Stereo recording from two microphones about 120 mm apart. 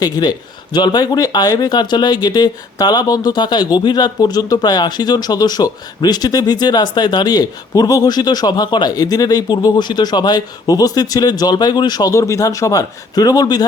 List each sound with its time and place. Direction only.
0.0 s speech: 35° left (ahead or behind)